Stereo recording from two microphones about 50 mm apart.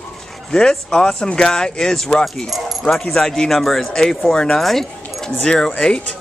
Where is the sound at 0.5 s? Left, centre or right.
Centre.